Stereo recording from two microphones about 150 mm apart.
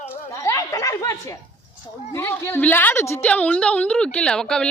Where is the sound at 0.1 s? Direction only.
20° left (ahead or behind).